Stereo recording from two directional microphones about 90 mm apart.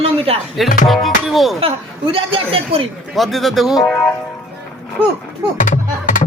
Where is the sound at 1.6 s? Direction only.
90° right.